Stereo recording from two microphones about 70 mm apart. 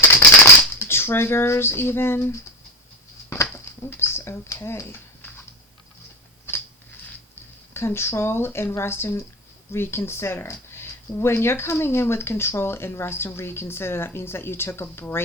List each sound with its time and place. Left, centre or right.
0.0 s a sound: left
0.7 s speech: left
3.4 s a sound: left
4.6 s speech: left
6.5 s mechanisms: left
7.7 s speech: left